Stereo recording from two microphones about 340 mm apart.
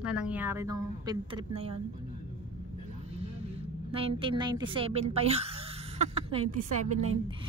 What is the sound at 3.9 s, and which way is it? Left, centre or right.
A woman's voice, centre.